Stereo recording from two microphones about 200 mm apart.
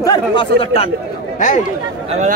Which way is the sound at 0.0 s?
20° left (ahead or behind).